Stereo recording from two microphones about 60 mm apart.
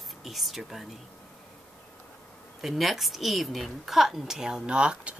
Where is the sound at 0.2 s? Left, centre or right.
Centre.